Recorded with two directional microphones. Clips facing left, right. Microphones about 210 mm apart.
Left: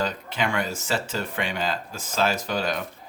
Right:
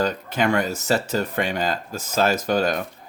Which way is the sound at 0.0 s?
40° right (ahead or behind).